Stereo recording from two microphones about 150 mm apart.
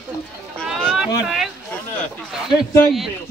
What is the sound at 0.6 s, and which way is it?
Speech, centre (ahead or behind).